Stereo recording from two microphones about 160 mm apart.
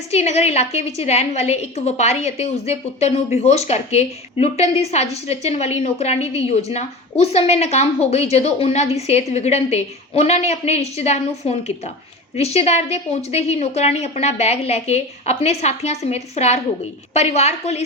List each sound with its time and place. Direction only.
0.1 s a woman's voice: 40° left (ahead or behind)